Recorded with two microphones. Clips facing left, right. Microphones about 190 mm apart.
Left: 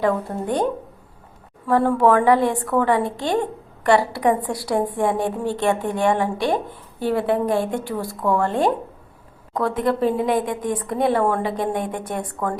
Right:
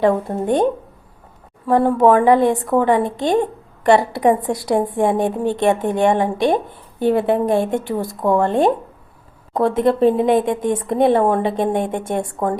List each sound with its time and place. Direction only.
0.0 s speech: 25° right (ahead or behind)